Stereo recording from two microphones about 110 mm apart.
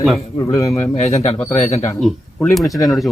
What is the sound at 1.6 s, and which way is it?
Speech, 80° left.